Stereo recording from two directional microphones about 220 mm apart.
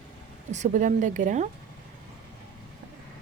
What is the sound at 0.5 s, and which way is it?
Speech, 35° right (ahead or behind).